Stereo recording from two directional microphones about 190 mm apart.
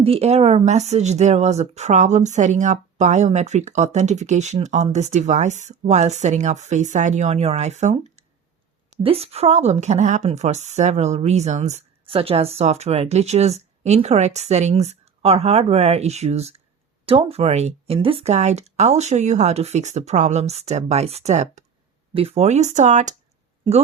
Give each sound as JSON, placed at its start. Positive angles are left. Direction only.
{"t": 0.0, "sound": "speech", "side_deg": -30}